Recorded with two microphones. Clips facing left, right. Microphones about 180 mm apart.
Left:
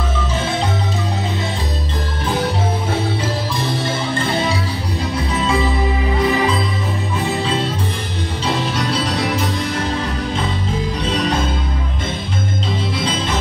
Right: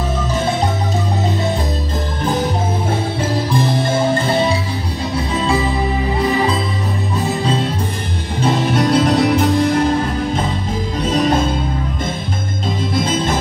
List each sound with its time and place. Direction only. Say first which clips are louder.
8.4 s music: right 6 dB; 50° right (ahead or behind)
12.9 s music: right 6 dB; 50° right (ahead or behind)